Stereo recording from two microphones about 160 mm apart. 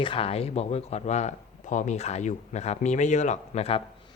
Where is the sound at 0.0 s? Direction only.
35° left (ahead or behind).